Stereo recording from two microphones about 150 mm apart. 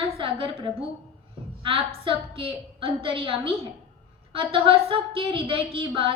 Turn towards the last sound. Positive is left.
turn(degrees=-35)  # may be behind; listen again after turning